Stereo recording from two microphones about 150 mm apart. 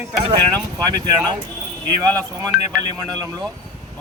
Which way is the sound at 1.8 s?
25° right (ahead or behind).